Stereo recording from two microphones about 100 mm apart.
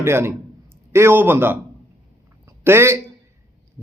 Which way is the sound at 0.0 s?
25° right (ahead or behind).